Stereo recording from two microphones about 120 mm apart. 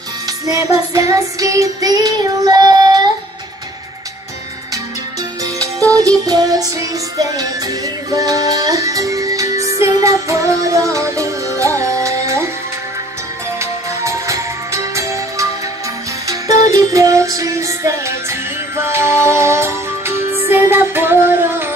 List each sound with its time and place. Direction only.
0.9 s child singing: 30° right (ahead or behind)
5.4 s music: 30° right (ahead or behind)
13.6 s music: 25° right (ahead or behind)
16.7 s music: 25° right (ahead or behind)